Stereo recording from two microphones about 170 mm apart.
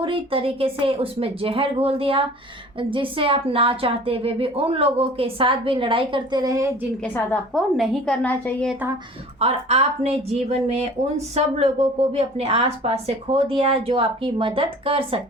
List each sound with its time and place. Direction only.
0.0 s a woman's voice: 30° right (ahead or behind)
7.0 s a woman's voice: 10° left (ahead or behind)
9.4 s a woman's voice: 40° right (ahead or behind)